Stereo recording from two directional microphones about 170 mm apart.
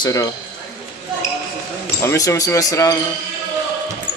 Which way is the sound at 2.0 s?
20° left (ahead or behind).